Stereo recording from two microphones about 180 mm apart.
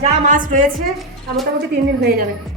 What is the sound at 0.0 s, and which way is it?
Speech, 45° right (ahead or behind).